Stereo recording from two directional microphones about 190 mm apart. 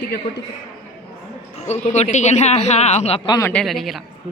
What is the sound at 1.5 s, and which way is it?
Speech, 35° left (ahead or behind).